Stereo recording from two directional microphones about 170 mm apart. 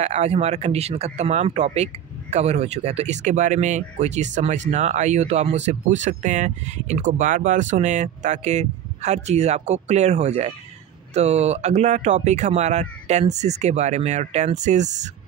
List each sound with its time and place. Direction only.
0.0 s speech: 40° right (ahead or behind)